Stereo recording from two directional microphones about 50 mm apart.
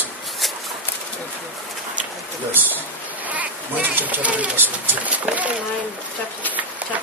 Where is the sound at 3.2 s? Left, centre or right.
Right.